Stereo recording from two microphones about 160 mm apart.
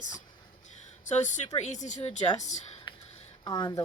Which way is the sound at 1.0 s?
50° left (ahead or behind).